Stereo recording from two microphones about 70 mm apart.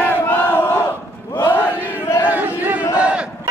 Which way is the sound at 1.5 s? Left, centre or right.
Left.